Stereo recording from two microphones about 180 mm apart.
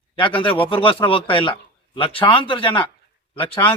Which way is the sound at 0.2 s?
30° left (ahead or behind).